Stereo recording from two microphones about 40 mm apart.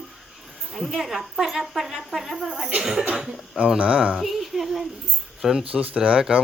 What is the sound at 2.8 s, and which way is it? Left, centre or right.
Speech, centre.